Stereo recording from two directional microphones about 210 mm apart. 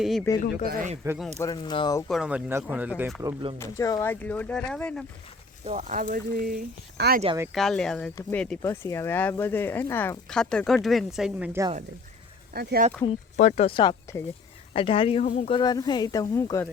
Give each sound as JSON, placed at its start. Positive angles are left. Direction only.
{"t": 0.0, "sound": "speech", "side_deg": 0}
{"t": 0.6, "sound": "speech", "side_deg": -45}
{"t": 1.4, "sound": "speech", "side_deg": 20}
{"t": 2.0, "sound": "speech", "side_deg": 0}
{"t": 3.6, "sound": "speech", "side_deg": 15}
{"t": 5.6, "sound": "speech", "side_deg": -35}
{"t": 7.5, "sound": "speech", "side_deg": 0}
{"t": 12.5, "sound": "speech", "side_deg": -45}
{"t": 13.3, "sound": "speech", "side_deg": 35}